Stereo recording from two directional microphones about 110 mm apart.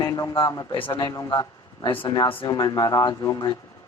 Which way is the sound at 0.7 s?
50° left (ahead or behind).